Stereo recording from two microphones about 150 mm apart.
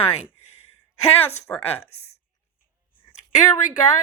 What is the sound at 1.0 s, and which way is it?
Speech, 40° left (ahead or behind).